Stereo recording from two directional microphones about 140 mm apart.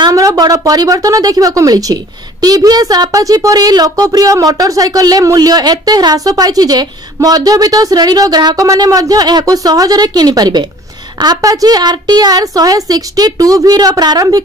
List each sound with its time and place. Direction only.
0.0 s a woman's voice: 25° right (ahead or behind)